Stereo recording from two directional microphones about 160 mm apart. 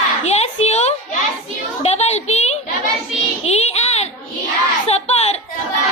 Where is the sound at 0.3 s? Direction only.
45° left (ahead or behind).